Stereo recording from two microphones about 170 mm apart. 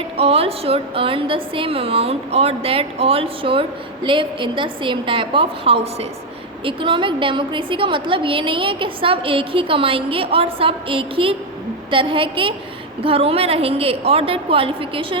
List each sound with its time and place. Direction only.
0.2 s a woman's voice: 35° right (ahead or behind)